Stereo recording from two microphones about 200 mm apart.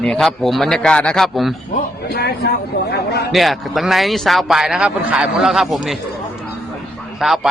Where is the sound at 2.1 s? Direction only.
50° left (ahead or behind).